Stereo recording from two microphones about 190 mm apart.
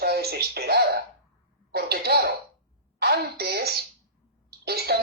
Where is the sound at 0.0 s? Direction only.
55° right (ahead or behind).